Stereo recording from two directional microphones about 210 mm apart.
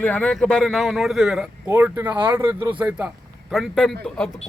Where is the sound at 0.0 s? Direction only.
5° left (ahead or behind).